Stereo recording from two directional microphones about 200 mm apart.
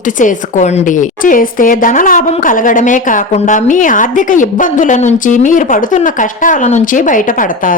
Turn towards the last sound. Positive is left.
turn(degrees=40)  # may be behind; listen again after turning